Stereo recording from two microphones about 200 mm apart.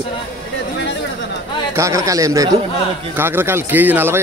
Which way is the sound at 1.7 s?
15° right (ahead or behind).